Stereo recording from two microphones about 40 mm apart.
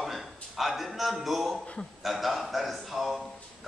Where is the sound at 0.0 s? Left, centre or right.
Centre.